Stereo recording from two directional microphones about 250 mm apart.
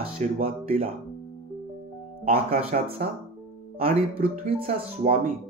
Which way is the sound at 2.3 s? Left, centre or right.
Right.